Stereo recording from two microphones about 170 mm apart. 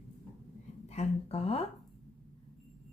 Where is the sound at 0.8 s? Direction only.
40° left (ahead or behind).